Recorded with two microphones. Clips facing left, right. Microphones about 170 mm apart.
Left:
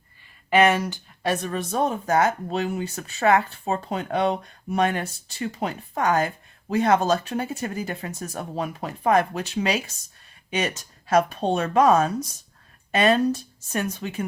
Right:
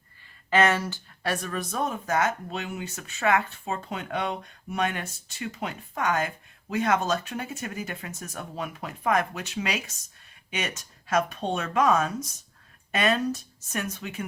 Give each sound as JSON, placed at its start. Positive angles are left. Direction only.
{"t": 0.5, "sound": "speech", "side_deg": 15}